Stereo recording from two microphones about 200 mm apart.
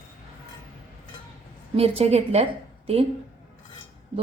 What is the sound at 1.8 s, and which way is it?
Speech, 30° right (ahead or behind).